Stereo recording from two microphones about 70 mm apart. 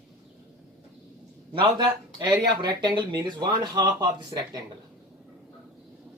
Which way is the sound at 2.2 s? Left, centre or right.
Right.